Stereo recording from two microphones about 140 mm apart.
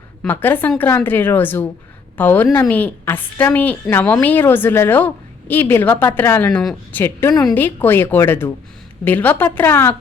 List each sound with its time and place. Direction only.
0.2 s a woman's voice: 15° left (ahead or behind)